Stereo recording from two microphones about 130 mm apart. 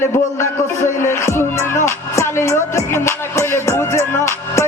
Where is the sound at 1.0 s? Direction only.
20° left (ahead or behind).